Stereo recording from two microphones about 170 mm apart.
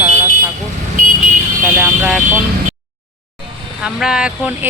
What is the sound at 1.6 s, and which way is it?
Speech, 10° right (ahead or behind).